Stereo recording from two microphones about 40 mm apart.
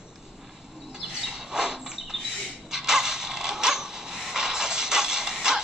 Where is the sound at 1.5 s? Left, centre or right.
Centre.